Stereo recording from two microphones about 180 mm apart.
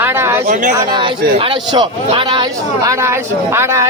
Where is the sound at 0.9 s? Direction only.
30° right (ahead or behind).